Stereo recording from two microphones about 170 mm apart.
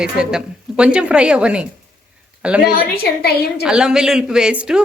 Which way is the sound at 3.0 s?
65° left (ahead or behind).